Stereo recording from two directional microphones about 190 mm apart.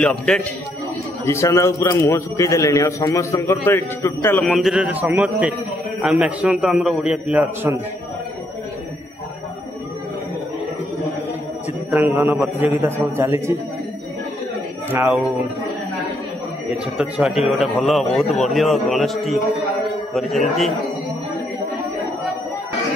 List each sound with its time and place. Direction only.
0.0 s a man's voice: 5° left (ahead or behind)
4.6 s a man's voice: 5° right (ahead or behind)
11.9 s a man's voice: 10° right (ahead or behind)
14.9 s a man's voice: 10° right (ahead or behind)
16.7 s a man's voice: 5° right (ahead or behind)